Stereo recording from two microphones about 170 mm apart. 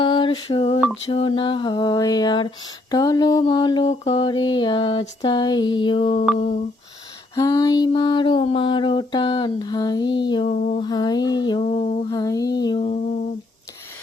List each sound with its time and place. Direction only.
0.0 s mantra: 30° left (ahead or behind)
7.3 s mantra: 20° left (ahead or behind)
10.5 s a sound: 45° left (ahead or behind)
10.8 s mantra: 25° left (ahead or behind)
11.6 s a sound: 40° left (ahead or behind)
12.0 s mantra: 20° left (ahead or behind)